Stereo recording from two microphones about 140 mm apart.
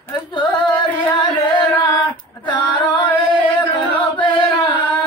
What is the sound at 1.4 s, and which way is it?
Carnatic music, 30° left (ahead or behind).